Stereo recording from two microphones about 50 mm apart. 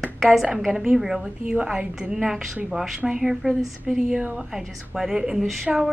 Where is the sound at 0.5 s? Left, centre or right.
Centre.